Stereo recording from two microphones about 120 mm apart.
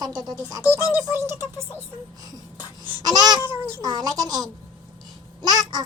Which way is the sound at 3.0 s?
35° right (ahead or behind).